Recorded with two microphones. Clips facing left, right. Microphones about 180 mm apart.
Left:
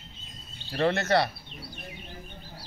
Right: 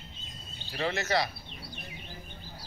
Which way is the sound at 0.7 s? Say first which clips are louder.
Left 5 dB; 60° left (ahead or behind).